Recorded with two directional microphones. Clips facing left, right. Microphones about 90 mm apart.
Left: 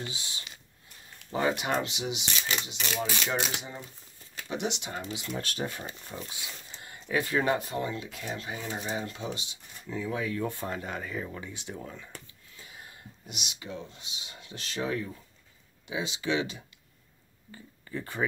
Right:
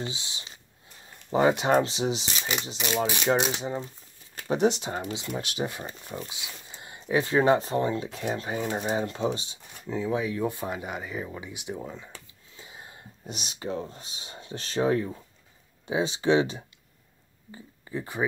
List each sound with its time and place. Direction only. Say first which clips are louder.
0.0 s speech: right 4 dB; 25° right (ahead or behind)
3.3 s speech: right 7 dB; 20° right (ahead or behind)
4.4 s speech: right 9 dB; 40° right (ahead or behind)
5.3 s speech: right 2 dB; 15° right (ahead or behind)
6.2 s a sound: right 1 dB; 20° right (ahead or behind)
7.1 s speech: right 5 dB; 25° right (ahead or behind); by 8.9 s 45° right (ahead or behind)
8.9 s speech: right 7 dB; 30° right (ahead or behind)
17.5 s speech: right 3 dB; 20° right (ahead or behind)